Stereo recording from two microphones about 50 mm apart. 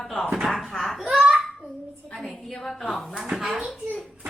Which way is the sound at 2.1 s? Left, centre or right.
Centre.